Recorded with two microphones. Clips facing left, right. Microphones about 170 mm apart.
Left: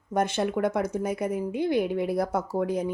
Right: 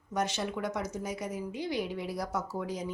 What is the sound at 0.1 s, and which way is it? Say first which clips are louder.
A woman's voice: left 7 dB; 55° left (ahead or behind).